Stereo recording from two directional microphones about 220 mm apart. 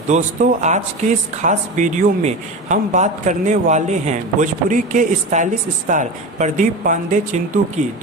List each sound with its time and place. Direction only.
0.1 s speech: 30° right (ahead or behind)